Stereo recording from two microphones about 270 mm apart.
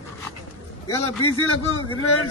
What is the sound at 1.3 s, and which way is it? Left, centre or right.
Speech, left.